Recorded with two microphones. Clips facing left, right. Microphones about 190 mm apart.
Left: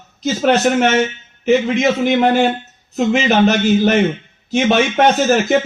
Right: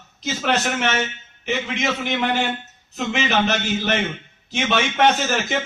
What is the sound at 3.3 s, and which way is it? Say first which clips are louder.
A man's voice: left 9 dB; 45° left (ahead or behind).